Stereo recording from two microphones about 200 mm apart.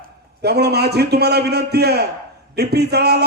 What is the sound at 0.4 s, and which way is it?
A man's voice, 55° right (ahead or behind).